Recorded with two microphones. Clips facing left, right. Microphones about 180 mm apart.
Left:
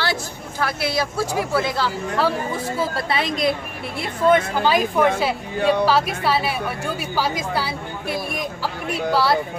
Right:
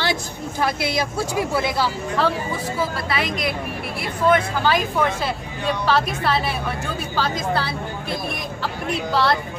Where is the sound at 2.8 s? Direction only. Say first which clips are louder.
Left 1 dB; 30° left (ahead or behind).